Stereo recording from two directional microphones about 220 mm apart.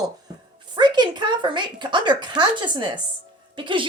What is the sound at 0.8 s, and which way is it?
A woman's voice, 20° right (ahead or behind).